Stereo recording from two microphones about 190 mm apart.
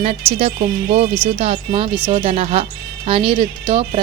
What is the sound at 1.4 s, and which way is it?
Speech, 30° right (ahead or behind).